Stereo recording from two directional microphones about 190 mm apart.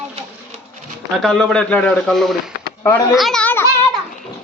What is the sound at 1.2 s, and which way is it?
A man's voice, 5° left (ahead or behind).